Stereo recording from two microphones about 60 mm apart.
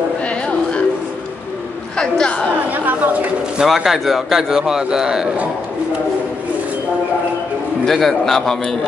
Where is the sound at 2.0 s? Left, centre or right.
Centre.